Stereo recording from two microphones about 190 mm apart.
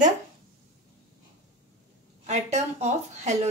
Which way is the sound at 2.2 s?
35° right (ahead or behind).